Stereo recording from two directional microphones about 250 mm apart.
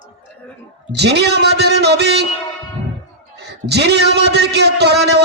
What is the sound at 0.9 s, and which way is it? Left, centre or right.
A man's voice, right.